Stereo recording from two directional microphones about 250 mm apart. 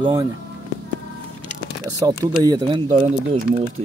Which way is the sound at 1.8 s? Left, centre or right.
Centre.